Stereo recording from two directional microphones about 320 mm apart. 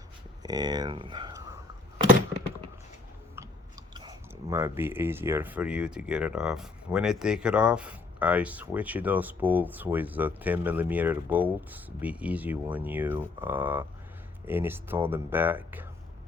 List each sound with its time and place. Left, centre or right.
0.4 s speech: centre
3.9 s speech: centre